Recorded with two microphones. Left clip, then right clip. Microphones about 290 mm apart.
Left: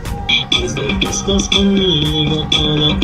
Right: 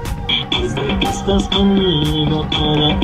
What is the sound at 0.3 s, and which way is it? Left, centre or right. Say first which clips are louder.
Frog: left 3 dB; centre.